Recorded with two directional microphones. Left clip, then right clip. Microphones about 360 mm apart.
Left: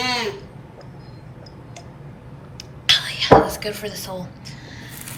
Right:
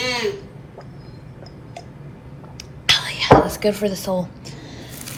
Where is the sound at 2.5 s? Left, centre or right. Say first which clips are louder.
Even; centre.